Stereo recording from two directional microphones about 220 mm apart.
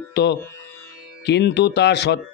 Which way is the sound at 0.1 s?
50° left (ahead or behind).